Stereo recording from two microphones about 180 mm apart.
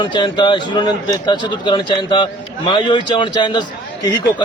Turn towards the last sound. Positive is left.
turn(degrees=25)  # may be behind; listen again after turning